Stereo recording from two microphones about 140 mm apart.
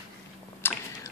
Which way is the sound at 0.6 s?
15° left (ahead or behind).